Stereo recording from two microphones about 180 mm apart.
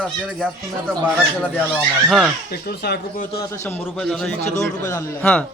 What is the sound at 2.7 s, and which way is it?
Speech, 60° left (ahead or behind).